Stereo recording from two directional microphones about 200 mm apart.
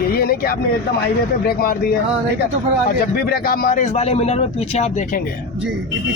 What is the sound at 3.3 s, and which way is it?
A man's voice, 50° left (ahead or behind).